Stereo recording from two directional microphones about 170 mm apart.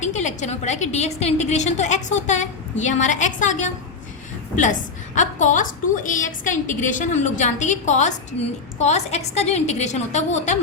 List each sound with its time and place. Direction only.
0.0 s a woman's voice: 45° left (ahead or behind)